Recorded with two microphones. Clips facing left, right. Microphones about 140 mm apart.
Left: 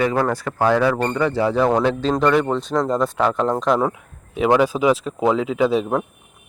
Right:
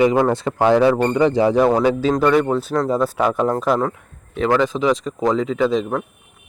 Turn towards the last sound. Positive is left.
turn(degrees=10)  # may be behind; listen again after turning